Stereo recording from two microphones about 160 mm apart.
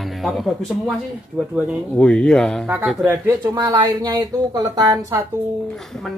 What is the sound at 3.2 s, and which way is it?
Speech, 15° right (ahead or behind).